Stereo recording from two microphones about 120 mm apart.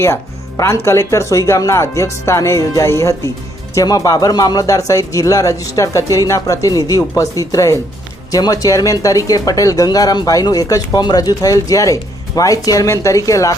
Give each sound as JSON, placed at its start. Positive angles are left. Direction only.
{"t": 0.0, "sound": "speech", "side_deg": 20}